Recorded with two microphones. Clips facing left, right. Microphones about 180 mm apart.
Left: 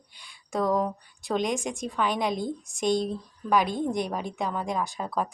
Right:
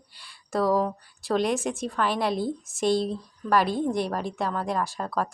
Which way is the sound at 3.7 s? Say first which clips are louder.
Right 2 dB; 15° left (ahead or behind).